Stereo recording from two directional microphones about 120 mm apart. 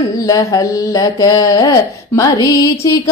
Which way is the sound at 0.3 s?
30° left (ahead or behind).